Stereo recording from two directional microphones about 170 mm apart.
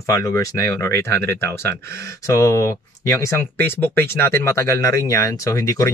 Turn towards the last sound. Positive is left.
turn(degrees=20)  # may be behind; listen again after turning